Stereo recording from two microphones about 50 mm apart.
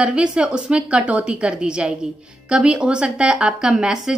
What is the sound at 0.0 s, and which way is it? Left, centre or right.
A woman's voice, right.